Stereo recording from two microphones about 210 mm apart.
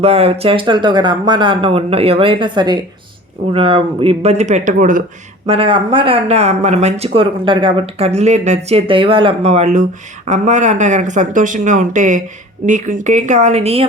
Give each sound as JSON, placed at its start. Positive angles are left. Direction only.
{"t": 0.0, "sound": "speech", "side_deg": -30}
{"t": 5.5, "sound": "speech", "side_deg": -25}